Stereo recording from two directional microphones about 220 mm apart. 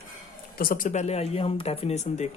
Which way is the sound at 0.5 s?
40° left (ahead or behind).